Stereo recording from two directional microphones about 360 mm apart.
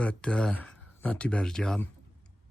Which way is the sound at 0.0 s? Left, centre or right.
Centre.